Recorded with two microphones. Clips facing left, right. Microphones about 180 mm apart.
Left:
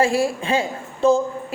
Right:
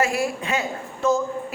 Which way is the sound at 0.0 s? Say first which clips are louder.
Left 4 dB; 30° left (ahead or behind).